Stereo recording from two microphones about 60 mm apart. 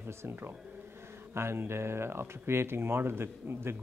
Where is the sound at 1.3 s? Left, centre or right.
Right.